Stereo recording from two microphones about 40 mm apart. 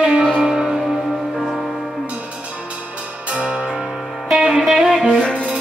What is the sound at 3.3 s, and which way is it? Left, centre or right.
Music, right.